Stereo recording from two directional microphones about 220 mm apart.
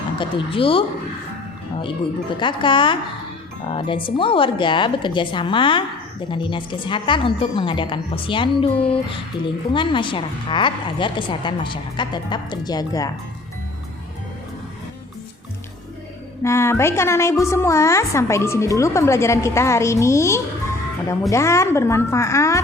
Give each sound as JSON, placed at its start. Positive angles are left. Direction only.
{"t": 0.2, "sound": "a woman's voice", "side_deg": 25}
{"t": 2.4, "sound": "a woman's voice", "side_deg": 20}
{"t": 16.4, "sound": "a woman's voice", "side_deg": 10}